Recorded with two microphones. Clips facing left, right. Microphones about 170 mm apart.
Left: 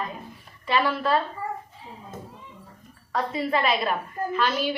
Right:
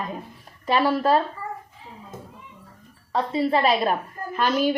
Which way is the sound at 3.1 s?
30° right (ahead or behind).